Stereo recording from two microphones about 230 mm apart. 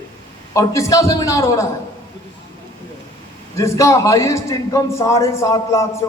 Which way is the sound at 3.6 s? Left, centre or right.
Centre.